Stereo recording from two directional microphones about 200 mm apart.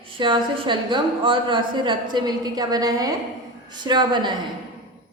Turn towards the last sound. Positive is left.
turn(degrees=-20)  # may be behind; listen again after turning